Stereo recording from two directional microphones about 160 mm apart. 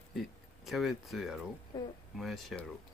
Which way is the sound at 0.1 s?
Centre (ahead or behind).